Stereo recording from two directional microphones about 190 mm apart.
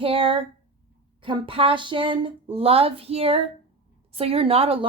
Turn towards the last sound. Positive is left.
turn(degrees=-30)  # may be behind; listen again after turning